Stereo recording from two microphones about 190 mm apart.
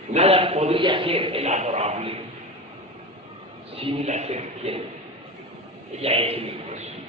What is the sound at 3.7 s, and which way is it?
A man's voice, 35° right (ahead or behind).